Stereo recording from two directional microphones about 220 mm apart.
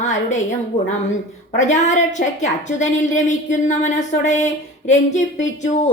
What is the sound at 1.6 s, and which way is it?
A woman's voice, 35° left (ahead or behind).